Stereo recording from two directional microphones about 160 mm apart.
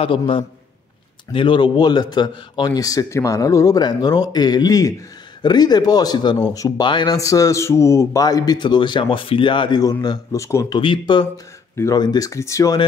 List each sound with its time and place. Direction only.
0.0 s speech: 35° left (ahead or behind); by 10.8 s 20° left (ahead or behind)
10.8 s speech: 30° left (ahead or behind)
11.7 s speech: 15° left (ahead or behind)